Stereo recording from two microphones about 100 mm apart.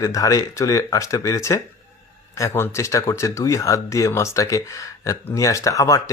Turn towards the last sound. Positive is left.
turn(degrees=35)  # may be behind; listen again after turning